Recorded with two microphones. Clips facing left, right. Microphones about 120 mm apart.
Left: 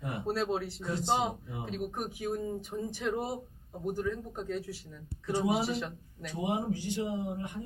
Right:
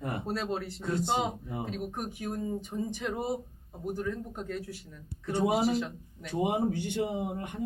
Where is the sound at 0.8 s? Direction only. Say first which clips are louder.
Right 4 dB; 55° right (ahead or behind).